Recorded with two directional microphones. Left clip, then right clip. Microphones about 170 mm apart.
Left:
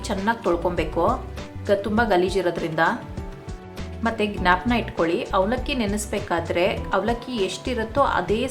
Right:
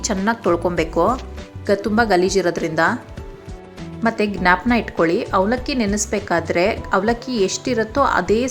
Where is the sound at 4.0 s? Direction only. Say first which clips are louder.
Right 5 dB; 30° right (ahead or behind).